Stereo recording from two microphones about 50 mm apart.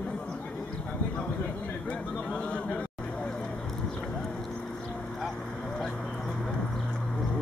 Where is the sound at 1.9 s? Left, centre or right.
Left.